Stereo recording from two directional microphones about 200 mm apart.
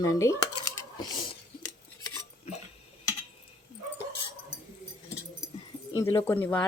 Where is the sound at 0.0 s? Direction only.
15° left (ahead or behind).